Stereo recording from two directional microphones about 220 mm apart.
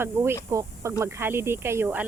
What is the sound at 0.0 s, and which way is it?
Speech, 10° right (ahead or behind).